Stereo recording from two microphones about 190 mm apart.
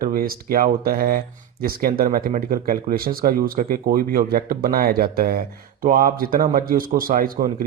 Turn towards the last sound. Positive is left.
turn(degrees=-50)  # may be behind; listen again after turning